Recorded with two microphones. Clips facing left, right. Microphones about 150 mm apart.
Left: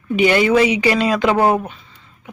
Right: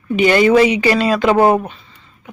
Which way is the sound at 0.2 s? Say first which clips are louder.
Right 3 dB; 10° left (ahead or behind).